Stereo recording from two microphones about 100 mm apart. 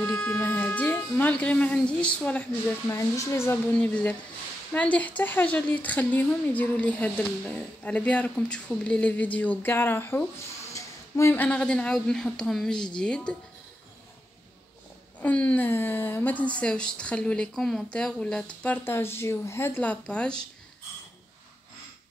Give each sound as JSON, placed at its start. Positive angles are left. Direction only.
{"t": 0.0, "sound": "speech", "side_deg": 10}
{"t": 2.9, "sound": "speech", "side_deg": 30}
{"t": 3.7, "sound": "speech", "side_deg": 15}
{"t": 10.7, "sound": "a sound", "side_deg": 30}
{"t": 11.3, "sound": "speech", "side_deg": 10}
{"t": 15.1, "sound": "speech", "side_deg": 15}